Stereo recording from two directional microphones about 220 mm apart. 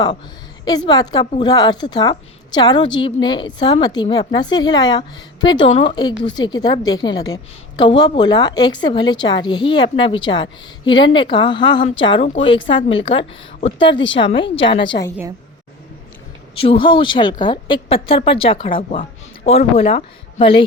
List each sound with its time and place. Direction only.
0.9 s a woman's voice: 20° left (ahead or behind)
16.6 s a woman's voice: 25° left (ahead or behind)